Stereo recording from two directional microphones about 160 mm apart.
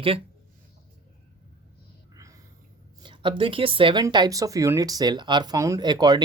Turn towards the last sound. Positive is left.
turn(degrees=-25)  # may be behind; listen again after turning